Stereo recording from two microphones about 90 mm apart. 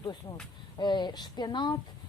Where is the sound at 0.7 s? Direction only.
55° left (ahead or behind).